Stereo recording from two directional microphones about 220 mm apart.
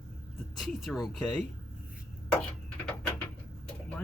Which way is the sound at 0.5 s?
Centre (ahead or behind).